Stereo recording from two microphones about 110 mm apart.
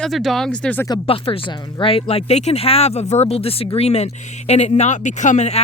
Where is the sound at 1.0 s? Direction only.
55° left (ahead or behind).